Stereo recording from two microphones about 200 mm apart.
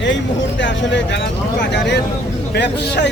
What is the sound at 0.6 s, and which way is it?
Speech, 65° left (ahead or behind).